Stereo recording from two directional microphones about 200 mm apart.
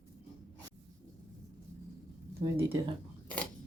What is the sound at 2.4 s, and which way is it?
Speech, 30° right (ahead or behind).